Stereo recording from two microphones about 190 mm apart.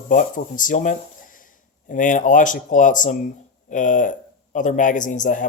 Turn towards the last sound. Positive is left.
turn(degrees=40)  # may be behind; listen again after turning